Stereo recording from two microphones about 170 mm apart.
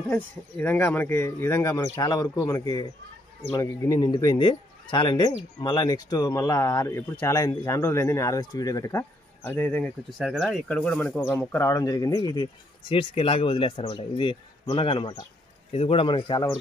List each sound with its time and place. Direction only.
0.1 s speech: 10° left (ahead or behind)
12.9 s speech: 35° left (ahead or behind)